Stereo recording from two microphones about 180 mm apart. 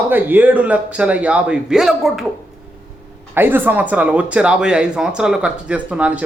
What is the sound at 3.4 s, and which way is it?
Speech, 10° right (ahead or behind).